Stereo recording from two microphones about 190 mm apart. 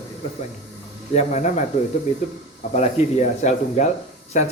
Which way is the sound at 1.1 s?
40° left (ahead or behind).